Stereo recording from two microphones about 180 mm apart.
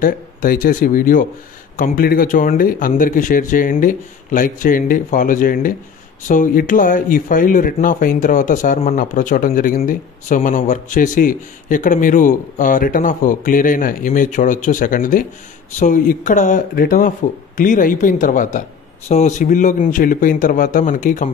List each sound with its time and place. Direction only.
0.0 s speech: 50° left (ahead or behind)